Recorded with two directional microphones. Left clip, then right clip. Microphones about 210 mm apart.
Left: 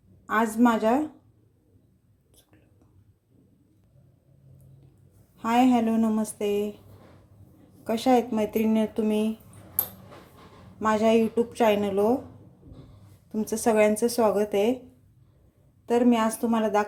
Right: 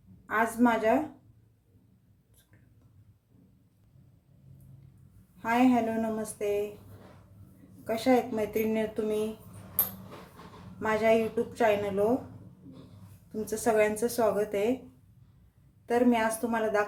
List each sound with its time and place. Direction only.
0.3 s speech: 30° left (ahead or behind)
5.4 s a woman's voice: 30° left (ahead or behind)
7.9 s speech: 30° left (ahead or behind)
10.8 s speech: 25° left (ahead or behind)
13.4 s speech: 25° left (ahead or behind)
15.9 s speech: 25° left (ahead or behind)